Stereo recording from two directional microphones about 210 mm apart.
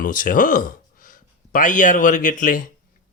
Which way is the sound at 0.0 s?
40° left (ahead or behind).